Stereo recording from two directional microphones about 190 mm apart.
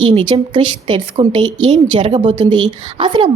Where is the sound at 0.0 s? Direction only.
25° right (ahead or behind).